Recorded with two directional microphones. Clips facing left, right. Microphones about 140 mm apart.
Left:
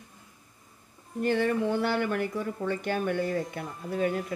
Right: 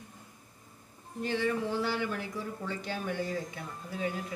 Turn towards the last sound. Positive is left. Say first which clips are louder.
# left 7 dB
turn(degrees=55)  # may be behind; listen again after turning